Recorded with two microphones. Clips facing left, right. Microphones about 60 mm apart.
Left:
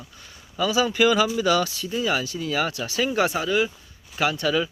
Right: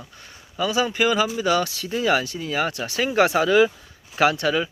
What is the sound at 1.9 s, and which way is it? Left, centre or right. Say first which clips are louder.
Speech: right 6 dB; right.